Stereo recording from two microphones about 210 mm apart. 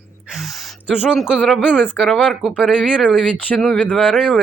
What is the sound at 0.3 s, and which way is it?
A woman's voice, centre (ahead or behind).